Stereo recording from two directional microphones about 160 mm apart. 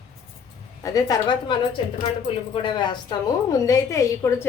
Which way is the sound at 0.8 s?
20° left (ahead or behind).